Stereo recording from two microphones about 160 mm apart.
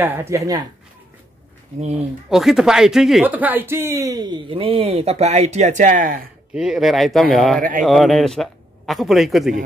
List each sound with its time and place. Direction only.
0.0 s speech: 15° right (ahead or behind)
1.8 s speech: 45° right (ahead or behind)
2.2 s speech: centre (ahead or behind); by 6.2 s 60° right (ahead or behind)
6.5 s speech: 5° right (ahead or behind)